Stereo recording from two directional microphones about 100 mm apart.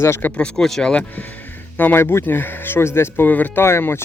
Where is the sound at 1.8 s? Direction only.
20° left (ahead or behind).